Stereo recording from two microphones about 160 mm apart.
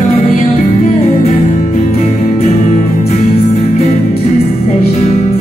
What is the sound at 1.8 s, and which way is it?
Music, 45° left (ahead or behind).